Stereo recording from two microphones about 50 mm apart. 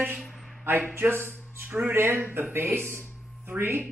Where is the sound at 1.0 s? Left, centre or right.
Right.